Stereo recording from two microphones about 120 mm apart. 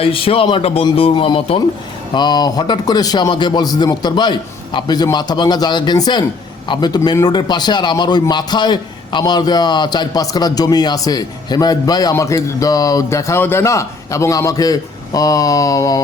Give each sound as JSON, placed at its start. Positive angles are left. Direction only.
{"t": 0.0, "sound": "a man's voice", "side_deg": 50}